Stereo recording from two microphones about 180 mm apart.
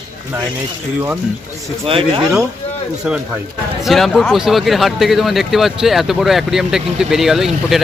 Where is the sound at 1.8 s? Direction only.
30° right (ahead or behind).